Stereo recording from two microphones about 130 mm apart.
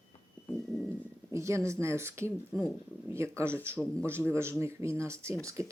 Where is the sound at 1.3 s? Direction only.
20° right (ahead or behind).